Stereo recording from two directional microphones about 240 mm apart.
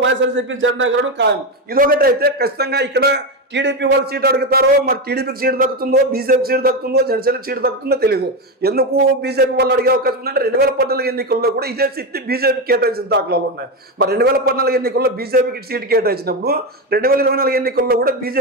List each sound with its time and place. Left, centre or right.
0.0 s a man's voice: right